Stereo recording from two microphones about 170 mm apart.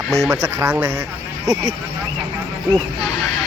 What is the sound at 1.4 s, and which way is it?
Speech, 25° right (ahead or behind).